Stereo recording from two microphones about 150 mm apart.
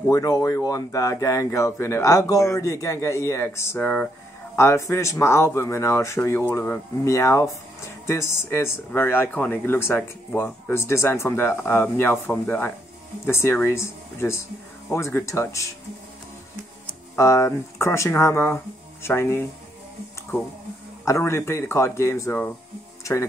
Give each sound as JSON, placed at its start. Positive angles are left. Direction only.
{"t": 0.1, "sound": "speech", "side_deg": 20}
{"t": 4.6, "sound": "speech", "side_deg": 20}
{"t": 17.1, "sound": "speech", "side_deg": 20}
{"t": 21.0, "sound": "speech", "side_deg": 20}